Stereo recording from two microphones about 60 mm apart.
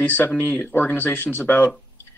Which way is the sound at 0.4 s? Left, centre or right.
Left.